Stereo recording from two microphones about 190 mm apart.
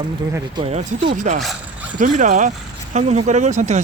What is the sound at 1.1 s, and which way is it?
Speech, 40° right (ahead or behind).